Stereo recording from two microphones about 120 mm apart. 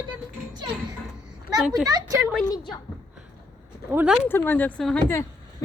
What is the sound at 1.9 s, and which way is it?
Speech, 30° right (ahead or behind).